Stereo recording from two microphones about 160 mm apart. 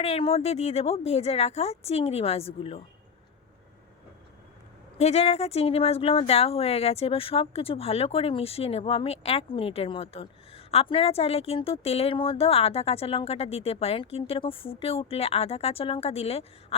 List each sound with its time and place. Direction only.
0.0 s speech: 40° left (ahead or behind)
4.9 s speech: 45° left (ahead or behind)